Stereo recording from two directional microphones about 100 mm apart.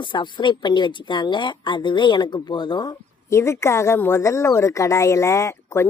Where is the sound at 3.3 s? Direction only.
30° left (ahead or behind).